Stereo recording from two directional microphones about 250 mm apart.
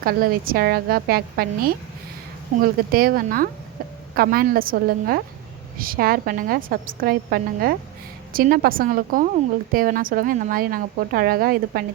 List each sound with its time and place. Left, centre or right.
0.0 s a woman's voice: right
2.9 s a woman's voice: right